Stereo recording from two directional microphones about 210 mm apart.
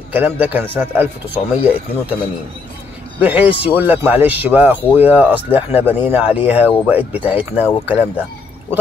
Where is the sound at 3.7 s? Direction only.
10° right (ahead or behind).